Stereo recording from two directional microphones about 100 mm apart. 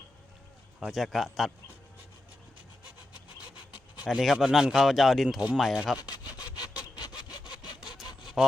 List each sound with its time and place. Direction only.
0.9 s speech: centre (ahead or behind)
2.8 s wood: 10° right (ahead or behind)
4.0 s speech: 5° right (ahead or behind)
7.0 s sawing: 45° left (ahead or behind)
8.4 s a sound: 5° right (ahead or behind)